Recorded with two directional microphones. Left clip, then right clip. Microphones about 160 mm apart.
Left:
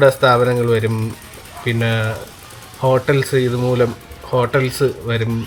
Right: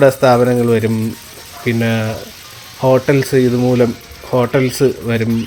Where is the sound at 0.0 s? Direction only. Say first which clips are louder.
Right 2 dB; 20° right (ahead or behind).